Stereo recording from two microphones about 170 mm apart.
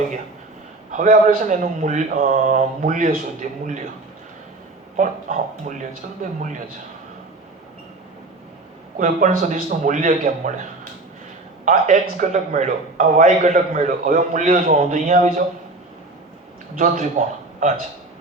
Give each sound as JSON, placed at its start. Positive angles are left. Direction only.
{"t": 0.9, "sound": "speech", "side_deg": -50}
{"t": 4.9, "sound": "speech", "side_deg": -45}
{"t": 9.0, "sound": "speech", "side_deg": -50}
{"t": 16.7, "sound": "speech", "side_deg": -50}